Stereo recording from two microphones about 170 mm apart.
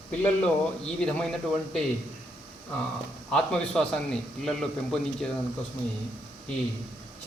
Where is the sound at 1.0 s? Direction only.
Centre (ahead or behind).